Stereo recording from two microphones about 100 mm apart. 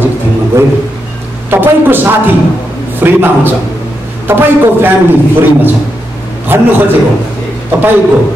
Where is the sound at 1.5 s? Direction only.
20° right (ahead or behind).